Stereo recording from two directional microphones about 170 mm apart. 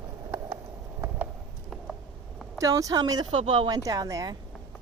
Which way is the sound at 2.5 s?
20° right (ahead or behind).